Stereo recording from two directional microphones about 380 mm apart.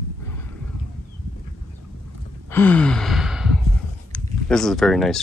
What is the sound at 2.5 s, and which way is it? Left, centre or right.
Sigh, centre.